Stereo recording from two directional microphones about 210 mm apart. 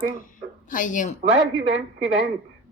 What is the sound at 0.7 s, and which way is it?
Speech, 40° left (ahead or behind).